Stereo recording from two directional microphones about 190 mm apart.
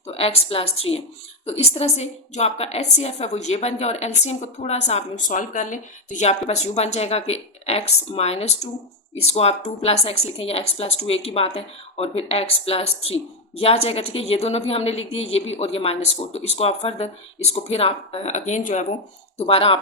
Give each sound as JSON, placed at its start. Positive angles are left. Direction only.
{"t": 0.1, "sound": "a woman's voice", "side_deg": 30}